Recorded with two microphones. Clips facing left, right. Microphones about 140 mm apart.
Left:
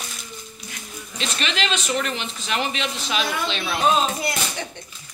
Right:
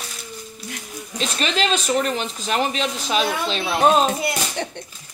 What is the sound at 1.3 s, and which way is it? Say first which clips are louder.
Speech: right 4 dB; 40° right (ahead or behind).